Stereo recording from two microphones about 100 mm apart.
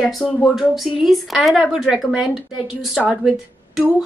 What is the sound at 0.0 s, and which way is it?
A woman's voice, centre (ahead or behind).